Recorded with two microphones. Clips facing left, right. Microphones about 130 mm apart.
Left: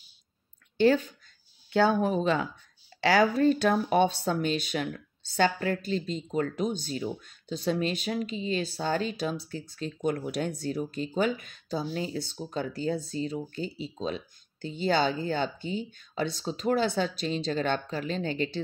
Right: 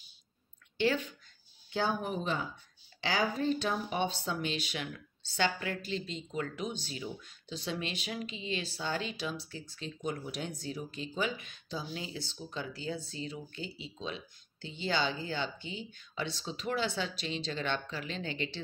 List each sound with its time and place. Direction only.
0.7 s speech: 40° left (ahead or behind)
1.7 s speech: 75° left (ahead or behind)
3.0 s speech: 70° left (ahead or behind)
4.4 s speech: 45° left (ahead or behind)
10.0 s speech: 60° left (ahead or behind)
10.8 s speech: 45° left (ahead or behind)